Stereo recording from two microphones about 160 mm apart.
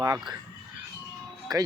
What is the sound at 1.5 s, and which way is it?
Speech, 25° right (ahead or behind).